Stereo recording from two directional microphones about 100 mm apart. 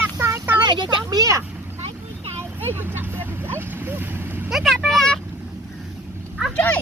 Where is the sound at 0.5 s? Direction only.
50° right (ahead or behind).